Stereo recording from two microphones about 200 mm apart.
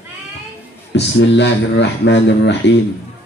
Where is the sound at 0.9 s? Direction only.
60° left (ahead or behind).